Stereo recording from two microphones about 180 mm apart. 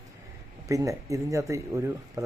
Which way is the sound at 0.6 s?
15° right (ahead or behind).